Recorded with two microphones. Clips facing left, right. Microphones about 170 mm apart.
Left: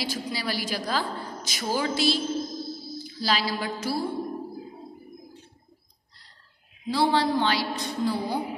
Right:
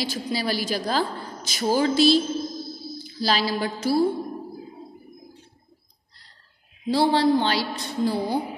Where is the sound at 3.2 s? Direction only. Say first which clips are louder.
Right 4 dB; 30° right (ahead or behind).